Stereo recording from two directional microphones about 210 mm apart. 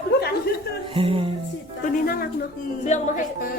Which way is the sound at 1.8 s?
45° left (ahead or behind).